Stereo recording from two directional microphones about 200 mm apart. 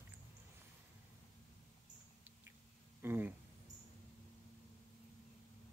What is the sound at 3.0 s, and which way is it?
Speech, 10° right (ahead or behind).